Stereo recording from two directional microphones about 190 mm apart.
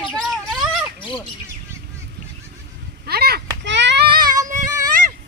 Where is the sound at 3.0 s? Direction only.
55° right (ahead or behind).